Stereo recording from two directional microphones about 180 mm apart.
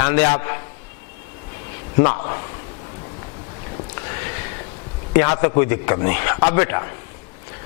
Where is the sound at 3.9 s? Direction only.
20° left (ahead or behind).